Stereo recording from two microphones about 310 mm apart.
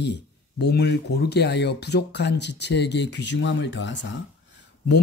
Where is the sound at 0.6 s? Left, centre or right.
Left.